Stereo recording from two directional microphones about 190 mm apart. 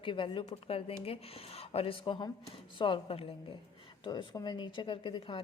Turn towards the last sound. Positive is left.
turn(degrees=25)  # may be behind; listen again after turning